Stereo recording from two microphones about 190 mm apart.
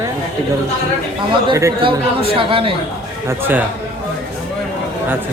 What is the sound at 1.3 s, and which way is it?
Speech, 20° right (ahead or behind).